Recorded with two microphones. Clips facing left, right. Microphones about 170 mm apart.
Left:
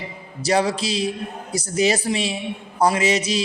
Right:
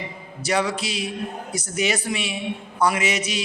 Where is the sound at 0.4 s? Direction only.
35° left (ahead or behind).